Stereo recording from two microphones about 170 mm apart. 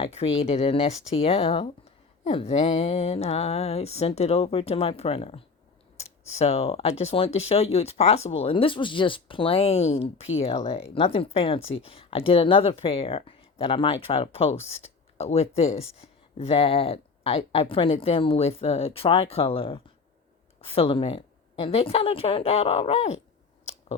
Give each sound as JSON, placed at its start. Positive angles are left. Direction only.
{"t": 0.0, "sound": "speech", "side_deg": 35}
{"t": 6.4, "sound": "speech", "side_deg": 35}